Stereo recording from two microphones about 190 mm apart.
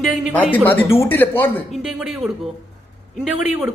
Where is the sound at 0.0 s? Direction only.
Centre (ahead or behind).